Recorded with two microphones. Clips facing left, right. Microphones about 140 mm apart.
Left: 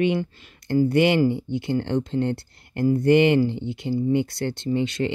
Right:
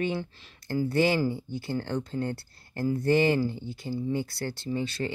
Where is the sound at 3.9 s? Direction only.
20° left (ahead or behind).